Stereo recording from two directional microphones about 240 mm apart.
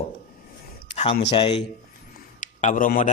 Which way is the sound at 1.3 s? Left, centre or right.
Left.